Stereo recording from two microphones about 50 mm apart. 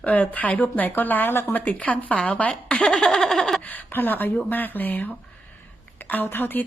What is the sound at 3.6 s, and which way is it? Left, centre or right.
Speech, left.